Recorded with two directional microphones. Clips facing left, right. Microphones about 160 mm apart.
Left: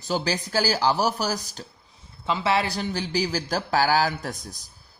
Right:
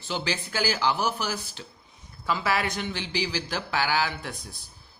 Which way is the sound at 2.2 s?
25° left (ahead or behind).